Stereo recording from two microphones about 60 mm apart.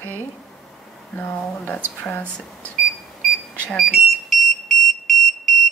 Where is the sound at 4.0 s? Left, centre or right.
Centre.